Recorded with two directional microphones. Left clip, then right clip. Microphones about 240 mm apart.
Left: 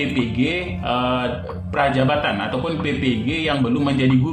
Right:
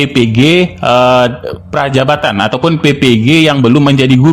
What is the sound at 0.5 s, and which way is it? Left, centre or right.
A man's voice, right.